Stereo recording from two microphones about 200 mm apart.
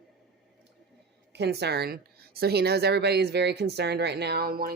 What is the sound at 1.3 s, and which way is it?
A woman's voice, 55° right (ahead or behind).